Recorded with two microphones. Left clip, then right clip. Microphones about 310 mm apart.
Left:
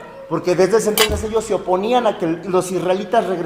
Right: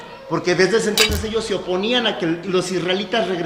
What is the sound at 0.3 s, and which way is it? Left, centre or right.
Speech, centre.